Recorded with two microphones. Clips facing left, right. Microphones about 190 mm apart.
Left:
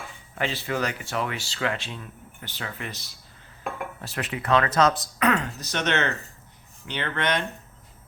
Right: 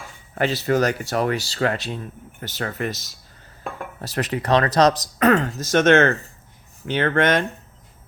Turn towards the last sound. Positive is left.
turn(degrees=-45)  # may be behind; listen again after turning